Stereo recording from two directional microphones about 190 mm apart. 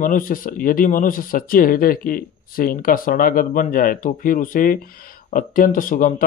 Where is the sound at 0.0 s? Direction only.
45° left (ahead or behind).